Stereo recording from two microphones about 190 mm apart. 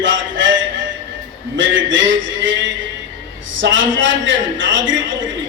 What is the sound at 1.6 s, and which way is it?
A man's voice, 80° right.